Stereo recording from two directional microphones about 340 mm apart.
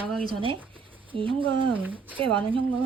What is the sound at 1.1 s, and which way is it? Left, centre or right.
Speech, centre.